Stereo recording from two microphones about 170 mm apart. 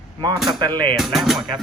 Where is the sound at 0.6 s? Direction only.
25° right (ahead or behind).